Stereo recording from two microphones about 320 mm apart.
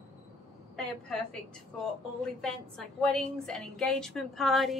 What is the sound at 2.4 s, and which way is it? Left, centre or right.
A woman's voice, centre.